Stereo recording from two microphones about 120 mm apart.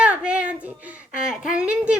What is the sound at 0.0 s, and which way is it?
Speech, 10° right (ahead or behind).